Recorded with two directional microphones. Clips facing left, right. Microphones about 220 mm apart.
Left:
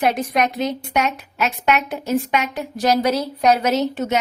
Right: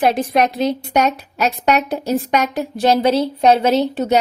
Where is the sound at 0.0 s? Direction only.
30° right (ahead or behind).